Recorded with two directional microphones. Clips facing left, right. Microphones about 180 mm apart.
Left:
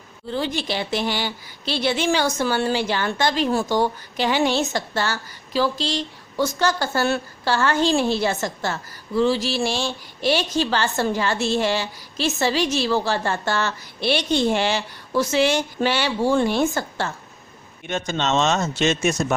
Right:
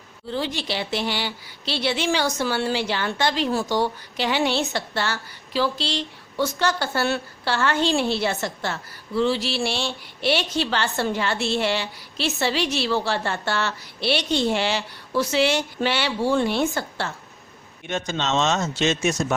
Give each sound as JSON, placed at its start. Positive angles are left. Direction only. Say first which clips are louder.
{"t": 0.3, "sound": "a woman's voice", "louder": "left 2 dB", "side_deg": 50}